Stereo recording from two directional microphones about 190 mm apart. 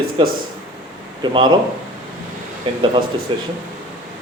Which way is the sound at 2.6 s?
25° right (ahead or behind).